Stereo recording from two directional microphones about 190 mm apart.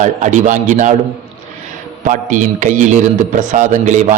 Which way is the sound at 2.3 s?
40° right (ahead or behind).